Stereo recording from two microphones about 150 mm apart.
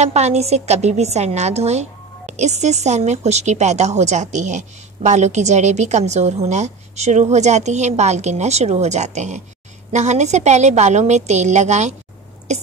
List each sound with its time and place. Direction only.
0.0 s a woman's voice: 45° right (ahead or behind)